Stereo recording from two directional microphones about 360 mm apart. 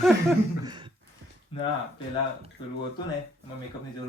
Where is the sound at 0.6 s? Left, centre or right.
Centre.